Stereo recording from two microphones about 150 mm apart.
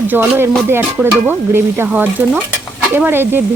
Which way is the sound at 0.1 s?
15° right (ahead or behind).